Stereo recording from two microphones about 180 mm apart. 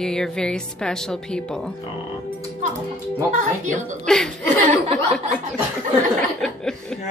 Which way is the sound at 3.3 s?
45° right (ahead or behind).